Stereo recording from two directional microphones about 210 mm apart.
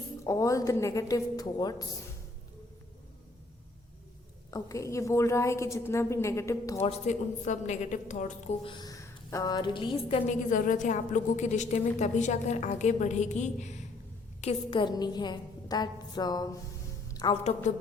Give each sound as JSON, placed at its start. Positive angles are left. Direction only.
{"t": 0.3, "sound": "a woman's voice", "side_deg": 15}
{"t": 4.5, "sound": "a woman's voice", "side_deg": 15}
{"t": 6.7, "sound": "a woman's voice", "side_deg": 30}
{"t": 10.5, "sound": "a woman's voice", "side_deg": 35}
{"t": 17.1, "sound": "music", "side_deg": 20}